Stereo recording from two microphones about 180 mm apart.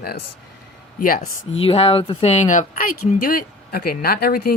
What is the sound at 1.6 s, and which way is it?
Speech, 35° left (ahead or behind).